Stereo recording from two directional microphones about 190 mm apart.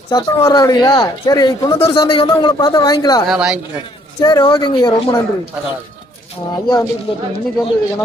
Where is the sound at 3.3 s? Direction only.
5° right (ahead or behind).